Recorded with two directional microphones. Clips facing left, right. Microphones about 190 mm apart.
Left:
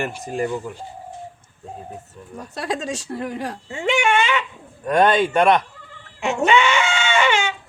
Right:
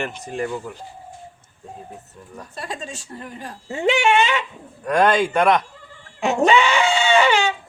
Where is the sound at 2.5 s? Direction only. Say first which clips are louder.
Left 7 dB; 75° left (ahead or behind).